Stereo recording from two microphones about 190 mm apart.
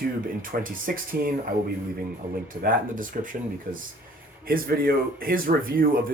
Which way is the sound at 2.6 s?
45° right (ahead or behind).